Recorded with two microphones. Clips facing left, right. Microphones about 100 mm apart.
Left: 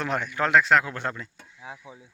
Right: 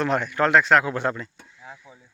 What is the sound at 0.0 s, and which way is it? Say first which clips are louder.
A man's voice: right 5 dB; 5° left (ahead or behind).